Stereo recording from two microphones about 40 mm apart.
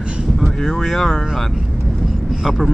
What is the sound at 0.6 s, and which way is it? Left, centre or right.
Speech, centre.